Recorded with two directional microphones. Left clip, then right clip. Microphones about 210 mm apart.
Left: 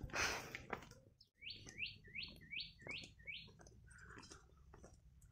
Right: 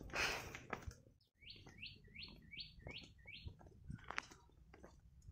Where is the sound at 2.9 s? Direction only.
25° left (ahead or behind).